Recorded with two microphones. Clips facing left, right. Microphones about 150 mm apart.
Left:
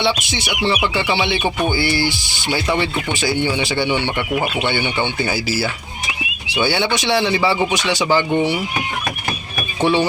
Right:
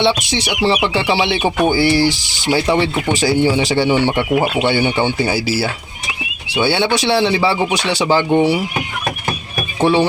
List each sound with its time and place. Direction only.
0.3 s speech: 35° right (ahead or behind)
1.8 s speech: 90° right
2.5 s speech: 35° right (ahead or behind)
8.0 s speech: 15° right (ahead or behind)
9.8 s speech: 25° right (ahead or behind)